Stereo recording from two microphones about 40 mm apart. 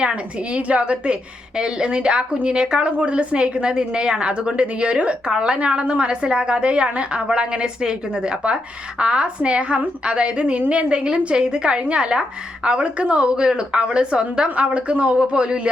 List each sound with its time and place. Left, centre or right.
0.1 s a woman's voice: right